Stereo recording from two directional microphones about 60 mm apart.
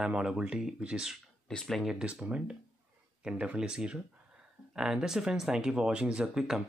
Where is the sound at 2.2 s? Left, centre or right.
Centre.